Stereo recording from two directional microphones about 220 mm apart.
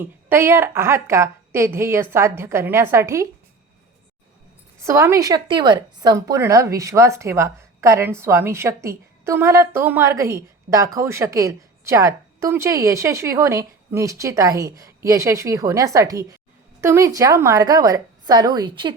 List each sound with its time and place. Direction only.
0.0 s a woman's voice: 10° right (ahead or behind)
4.8 s a woman's voice: 15° right (ahead or behind)